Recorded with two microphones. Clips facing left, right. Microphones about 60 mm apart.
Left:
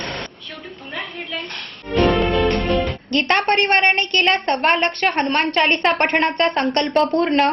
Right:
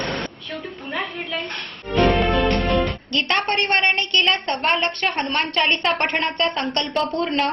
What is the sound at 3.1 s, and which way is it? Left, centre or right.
A woman's voice, left.